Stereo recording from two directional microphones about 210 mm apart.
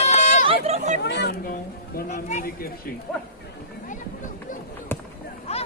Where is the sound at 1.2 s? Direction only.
45° left (ahead or behind).